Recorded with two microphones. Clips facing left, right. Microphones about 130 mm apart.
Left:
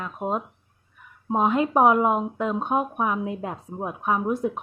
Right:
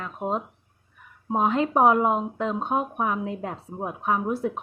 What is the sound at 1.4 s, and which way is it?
Speech, 15° left (ahead or behind).